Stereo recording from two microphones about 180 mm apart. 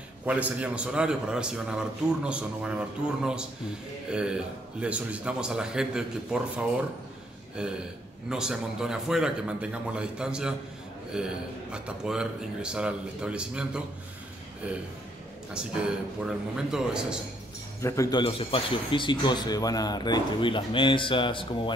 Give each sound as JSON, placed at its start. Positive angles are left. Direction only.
{"t": 0.2, "sound": "speech", "side_deg": -10}
{"t": 7.6, "sound": "speech", "side_deg": -5}
{"t": 15.5, "sound": "speech", "side_deg": -5}
{"t": 17.8, "sound": "a man's voice", "side_deg": 15}
{"t": 18.2, "sound": "speech", "side_deg": 30}